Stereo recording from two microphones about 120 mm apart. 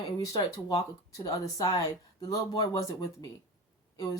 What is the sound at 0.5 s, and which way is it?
A woman's voice, 30° left (ahead or behind).